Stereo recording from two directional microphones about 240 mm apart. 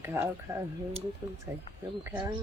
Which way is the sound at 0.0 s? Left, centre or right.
Centre.